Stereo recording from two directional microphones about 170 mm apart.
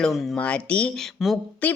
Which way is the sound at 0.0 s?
Centre (ahead or behind).